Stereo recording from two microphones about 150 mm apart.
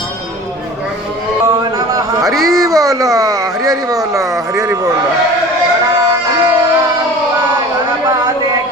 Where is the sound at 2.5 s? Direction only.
25° right (ahead or behind).